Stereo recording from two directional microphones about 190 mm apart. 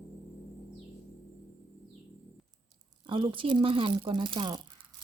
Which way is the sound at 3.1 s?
25° right (ahead or behind).